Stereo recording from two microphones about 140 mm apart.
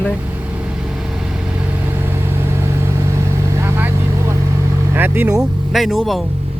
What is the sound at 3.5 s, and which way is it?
Vehicle, 20° right (ahead or behind).